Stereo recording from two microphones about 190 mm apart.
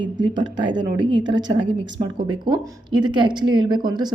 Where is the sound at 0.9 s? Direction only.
70° right (ahead or behind).